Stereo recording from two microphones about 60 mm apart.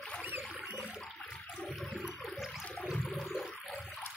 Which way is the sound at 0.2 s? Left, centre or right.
Right.